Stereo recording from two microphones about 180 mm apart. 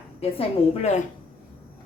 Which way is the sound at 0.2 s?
35° left (ahead or behind).